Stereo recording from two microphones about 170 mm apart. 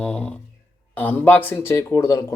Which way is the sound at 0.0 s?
5° left (ahead or behind).